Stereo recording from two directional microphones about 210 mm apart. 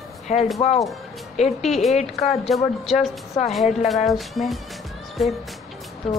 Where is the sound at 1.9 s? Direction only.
30° left (ahead or behind).